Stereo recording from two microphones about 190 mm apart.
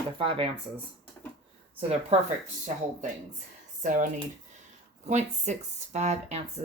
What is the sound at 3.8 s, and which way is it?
Speech, 40° right (ahead or behind).